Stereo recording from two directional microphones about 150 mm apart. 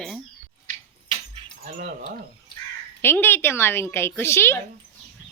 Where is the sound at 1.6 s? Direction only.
70° right (ahead or behind).